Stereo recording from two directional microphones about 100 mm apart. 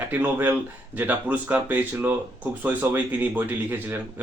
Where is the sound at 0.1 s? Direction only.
20° right (ahead or behind).